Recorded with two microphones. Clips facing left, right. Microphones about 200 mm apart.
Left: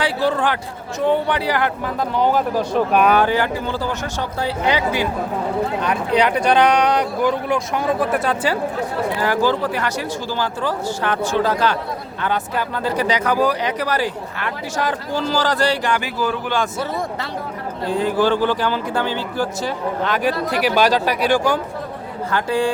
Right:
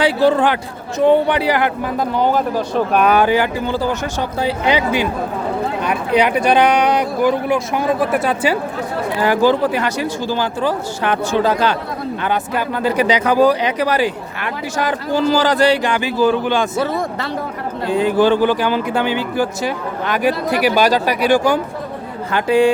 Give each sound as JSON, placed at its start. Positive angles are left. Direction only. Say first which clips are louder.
{"t": 0.0, "sound": "speech", "louder": "right 5 dB", "side_deg": -20}
{"t": 2.1, "sound": "speech", "louder": "even", "side_deg": 5}
{"t": 3.2, "sound": "speech", "louder": "right 3 dB", "side_deg": -10}
{"t": 9.1, "sound": "speech", "louder": "right 6 dB", "side_deg": -20}
{"t": 16.7, "sound": "speech", "louder": "right 5 dB", "side_deg": -90}
{"t": 17.8, "sound": "speech", "louder": "right 4 dB", "side_deg": -20}